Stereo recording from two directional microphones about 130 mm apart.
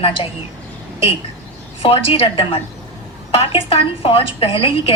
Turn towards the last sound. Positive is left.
turn(degrees=45)  # may be behind; listen again after turning